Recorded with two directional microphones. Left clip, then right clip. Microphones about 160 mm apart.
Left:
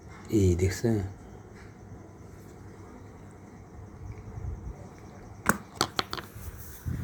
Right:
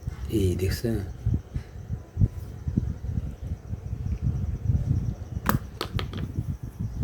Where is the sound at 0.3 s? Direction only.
Centre (ahead or behind).